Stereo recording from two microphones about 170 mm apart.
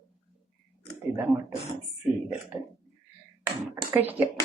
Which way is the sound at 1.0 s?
15° right (ahead or behind).